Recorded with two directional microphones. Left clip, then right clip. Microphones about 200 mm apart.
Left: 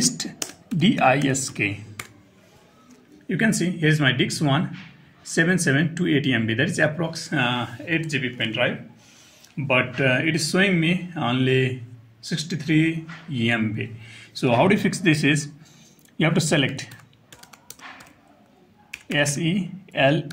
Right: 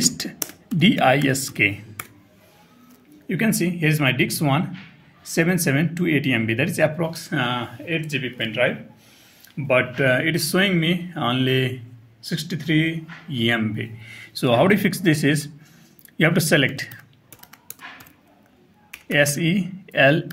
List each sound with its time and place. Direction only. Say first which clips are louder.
0.8 s speech: right 2 dB; 25° right (ahead or behind)
3.3 s speech: even; 15° right (ahead or behind)
19.6 s speech: right 4 dB; 25° right (ahead or behind)